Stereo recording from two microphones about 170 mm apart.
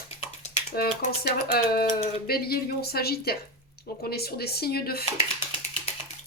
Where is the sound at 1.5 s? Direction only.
65° left (ahead or behind).